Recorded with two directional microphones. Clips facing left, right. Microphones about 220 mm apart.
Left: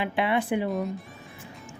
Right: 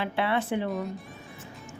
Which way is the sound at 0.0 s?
15° left (ahead or behind).